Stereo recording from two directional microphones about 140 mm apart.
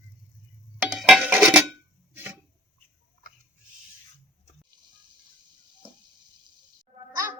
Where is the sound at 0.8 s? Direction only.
Centre (ahead or behind).